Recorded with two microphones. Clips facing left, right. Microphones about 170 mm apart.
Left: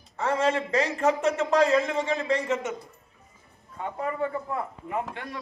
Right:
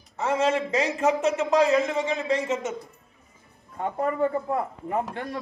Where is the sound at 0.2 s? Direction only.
20° right (ahead or behind).